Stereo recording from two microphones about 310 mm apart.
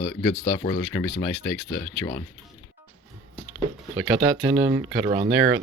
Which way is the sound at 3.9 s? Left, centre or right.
Centre.